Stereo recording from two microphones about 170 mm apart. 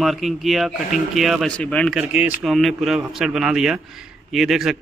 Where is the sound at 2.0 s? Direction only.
5° right (ahead or behind).